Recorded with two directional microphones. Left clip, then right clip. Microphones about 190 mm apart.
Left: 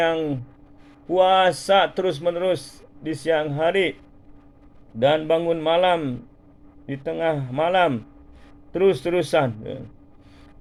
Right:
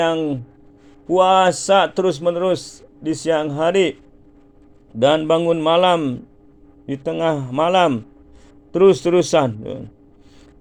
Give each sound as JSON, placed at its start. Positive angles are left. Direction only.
{"t": 0.0, "sound": "a man's voice", "side_deg": -30}
{"t": 4.9, "sound": "a man's voice", "side_deg": -40}